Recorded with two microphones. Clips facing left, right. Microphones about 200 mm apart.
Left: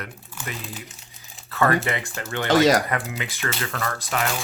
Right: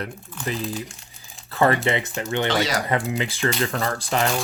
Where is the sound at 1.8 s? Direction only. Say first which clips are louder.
Right 4 dB; 20° right (ahead or behind).